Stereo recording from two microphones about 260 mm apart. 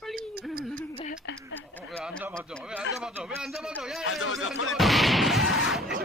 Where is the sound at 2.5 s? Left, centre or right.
Centre.